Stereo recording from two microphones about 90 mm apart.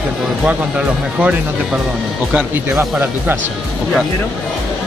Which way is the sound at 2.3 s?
25° right (ahead or behind).